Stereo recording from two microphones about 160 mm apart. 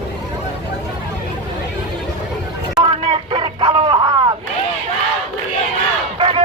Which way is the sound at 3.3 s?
30° right (ahead or behind).